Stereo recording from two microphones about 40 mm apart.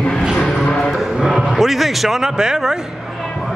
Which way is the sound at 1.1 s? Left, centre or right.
Centre.